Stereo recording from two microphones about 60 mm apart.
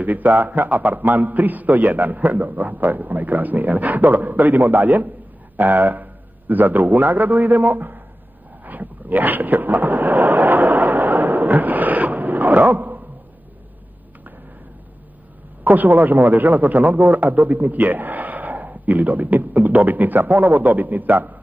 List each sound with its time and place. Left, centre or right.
0.0 s a man's voice: right
8.6 s a sound: right
15.6 s a man's voice: right